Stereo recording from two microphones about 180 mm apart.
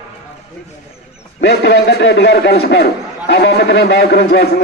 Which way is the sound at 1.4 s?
65° left (ahead or behind).